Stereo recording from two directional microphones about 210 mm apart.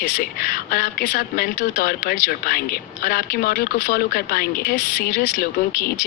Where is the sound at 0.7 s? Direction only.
50° left (ahead or behind).